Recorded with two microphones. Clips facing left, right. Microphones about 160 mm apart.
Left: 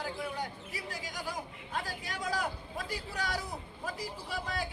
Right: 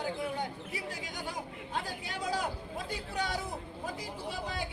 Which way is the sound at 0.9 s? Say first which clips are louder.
Even; 25° right (ahead or behind).